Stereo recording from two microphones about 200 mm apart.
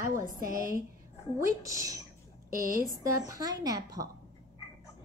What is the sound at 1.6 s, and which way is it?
Speech, 15° right (ahead or behind).